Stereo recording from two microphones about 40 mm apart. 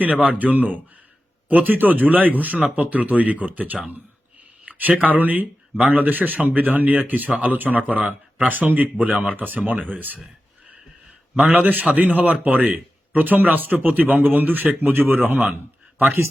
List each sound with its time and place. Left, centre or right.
0.0 s speech: right
11.3 s speech: right